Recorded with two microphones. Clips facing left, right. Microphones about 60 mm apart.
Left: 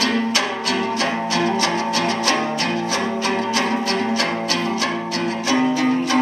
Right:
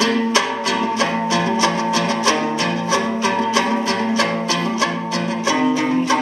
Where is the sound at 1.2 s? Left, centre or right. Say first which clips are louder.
Right 1 dB; right.